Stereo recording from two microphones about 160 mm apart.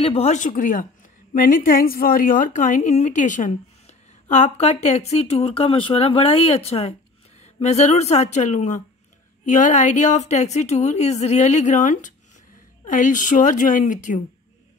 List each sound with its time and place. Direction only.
0.0 s a woman's voice: 45° left (ahead or behind)